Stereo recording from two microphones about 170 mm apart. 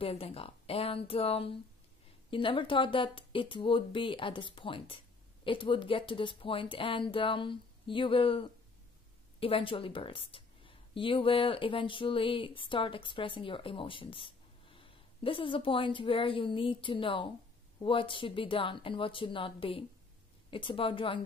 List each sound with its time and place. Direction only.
0.0 s a woman's voice: 35° left (ahead or behind)